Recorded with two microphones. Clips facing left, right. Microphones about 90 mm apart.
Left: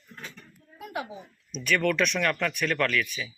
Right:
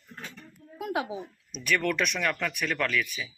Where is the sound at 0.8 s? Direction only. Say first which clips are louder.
Right 4 dB; 90° right.